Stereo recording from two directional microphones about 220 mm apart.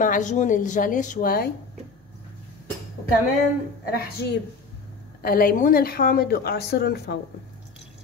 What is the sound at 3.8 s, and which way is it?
A woman's voice, 45° left (ahead or behind).